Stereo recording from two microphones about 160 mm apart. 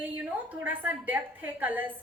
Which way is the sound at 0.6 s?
10° right (ahead or behind).